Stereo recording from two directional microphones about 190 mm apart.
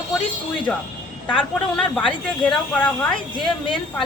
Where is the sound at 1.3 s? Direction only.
5° left (ahead or behind).